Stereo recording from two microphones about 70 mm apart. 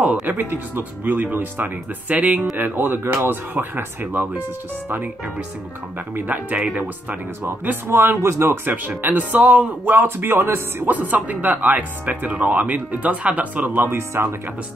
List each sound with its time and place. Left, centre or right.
0.0 s music: centre
0.3 s speech: right
6.1 s speech: right
8.2 s speech: right
8.6 s speech: right